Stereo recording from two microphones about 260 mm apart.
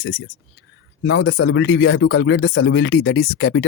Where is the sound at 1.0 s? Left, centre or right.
Left.